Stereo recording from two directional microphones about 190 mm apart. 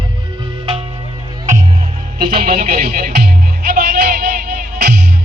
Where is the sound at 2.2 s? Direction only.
50° right (ahead or behind).